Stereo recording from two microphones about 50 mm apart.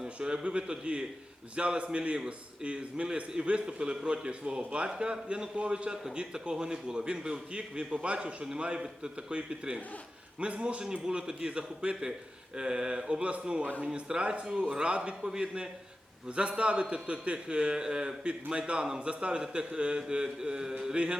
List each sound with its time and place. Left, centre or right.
0.0 s a man's voice: centre